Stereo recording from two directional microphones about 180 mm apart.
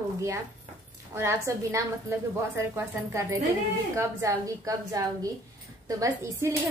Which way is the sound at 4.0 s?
15° right (ahead or behind).